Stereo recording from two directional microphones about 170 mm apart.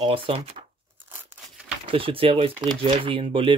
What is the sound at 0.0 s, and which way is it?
Speech, 30° right (ahead or behind).